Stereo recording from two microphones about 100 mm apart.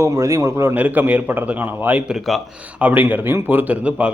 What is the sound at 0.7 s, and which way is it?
A man's voice, 15° right (ahead or behind).